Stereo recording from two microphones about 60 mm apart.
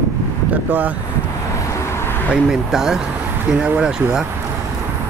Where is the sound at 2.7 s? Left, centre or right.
Centre.